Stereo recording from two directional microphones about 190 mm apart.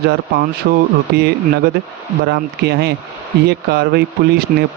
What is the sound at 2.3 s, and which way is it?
Speech, 60° right (ahead or behind).